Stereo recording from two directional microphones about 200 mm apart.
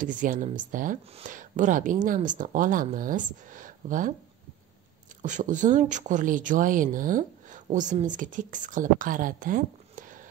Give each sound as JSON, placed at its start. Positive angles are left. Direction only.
{"t": 0.0, "sound": "speech", "side_deg": -40}
{"t": 5.2, "sound": "speech", "side_deg": -40}